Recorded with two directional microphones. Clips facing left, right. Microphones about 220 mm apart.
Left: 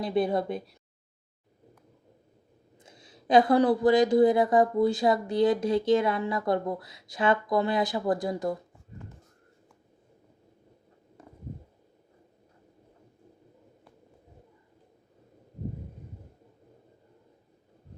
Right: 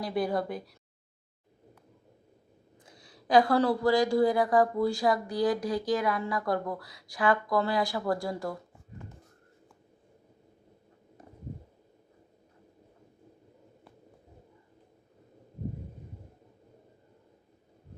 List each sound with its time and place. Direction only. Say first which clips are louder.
0.0 s a woman's voice: left 3 dB; 25° left (ahead or behind)
2.8 s a woman's voice: left 4 dB; 20° left (ahead or behind)